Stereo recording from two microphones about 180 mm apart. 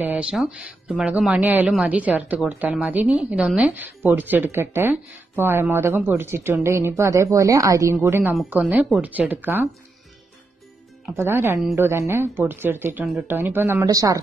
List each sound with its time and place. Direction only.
0.0 s speech: 5° right (ahead or behind)
11.1 s speech: 15° right (ahead or behind)
13.4 s speech: 10° right (ahead or behind)